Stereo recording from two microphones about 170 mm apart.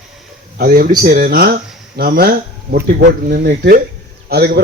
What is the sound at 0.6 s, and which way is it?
Speech, 55° right (ahead or behind).